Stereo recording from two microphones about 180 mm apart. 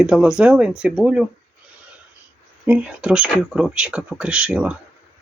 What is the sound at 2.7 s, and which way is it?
Speech, 5° right (ahead or behind).